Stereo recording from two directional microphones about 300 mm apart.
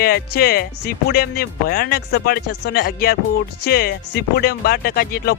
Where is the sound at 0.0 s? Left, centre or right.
Left.